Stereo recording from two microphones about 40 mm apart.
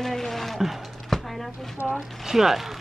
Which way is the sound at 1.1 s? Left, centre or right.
Centre.